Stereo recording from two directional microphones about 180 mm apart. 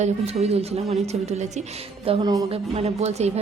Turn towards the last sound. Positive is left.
turn(degrees=-35)  # may be behind; listen again after turning